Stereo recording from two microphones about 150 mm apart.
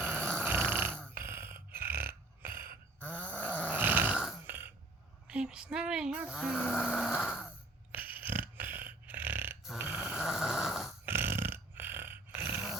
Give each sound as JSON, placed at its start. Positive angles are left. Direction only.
{"t": 0.0, "sound": "dog", "side_deg": -15}
{"t": 1.1, "sound": "burping", "side_deg": -15}
{"t": 3.7, "sound": "grunt", "side_deg": -10}
{"t": 5.3, "sound": "speech", "side_deg": -5}
{"t": 7.9, "sound": "burping", "side_deg": -10}
{"t": 9.7, "sound": "snoring", "side_deg": -10}
{"t": 11.0, "sound": "dog", "side_deg": -15}